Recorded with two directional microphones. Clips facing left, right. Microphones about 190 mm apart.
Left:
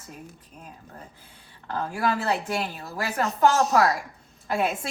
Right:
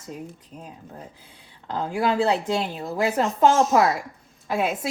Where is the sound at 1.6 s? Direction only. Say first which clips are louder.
Right 3 dB; 15° right (ahead or behind).